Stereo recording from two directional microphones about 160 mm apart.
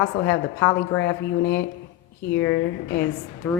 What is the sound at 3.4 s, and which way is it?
Speech, 10° left (ahead or behind).